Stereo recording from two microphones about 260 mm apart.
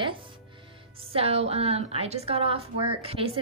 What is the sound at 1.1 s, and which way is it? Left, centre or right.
A woman's voice, right.